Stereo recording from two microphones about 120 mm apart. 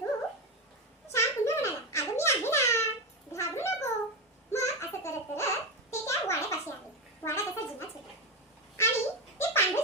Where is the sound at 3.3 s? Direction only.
25° left (ahead or behind).